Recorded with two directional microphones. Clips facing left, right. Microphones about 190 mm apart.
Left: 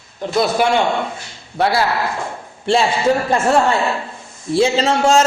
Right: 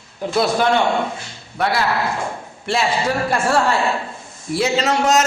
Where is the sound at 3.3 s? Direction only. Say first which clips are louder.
Left 3 dB; 20° left (ahead or behind).